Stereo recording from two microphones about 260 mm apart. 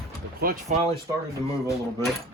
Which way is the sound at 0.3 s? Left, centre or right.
Right.